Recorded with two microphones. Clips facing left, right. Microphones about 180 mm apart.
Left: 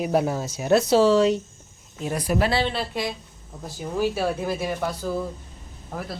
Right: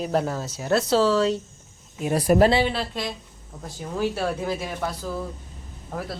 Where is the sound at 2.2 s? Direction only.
45° right (ahead or behind).